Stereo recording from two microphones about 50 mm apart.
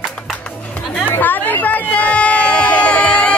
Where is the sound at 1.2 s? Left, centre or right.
Left.